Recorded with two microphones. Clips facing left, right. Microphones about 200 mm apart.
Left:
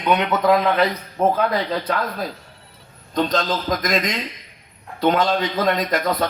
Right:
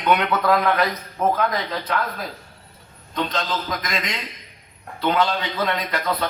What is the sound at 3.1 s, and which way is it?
A man's voice, 40° left (ahead or behind).